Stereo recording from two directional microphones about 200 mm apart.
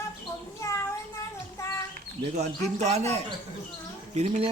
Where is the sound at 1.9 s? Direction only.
35° right (ahead or behind).